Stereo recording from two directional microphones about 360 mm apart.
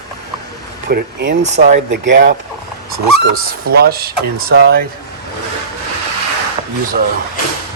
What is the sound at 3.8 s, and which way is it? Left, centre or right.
Speech, right.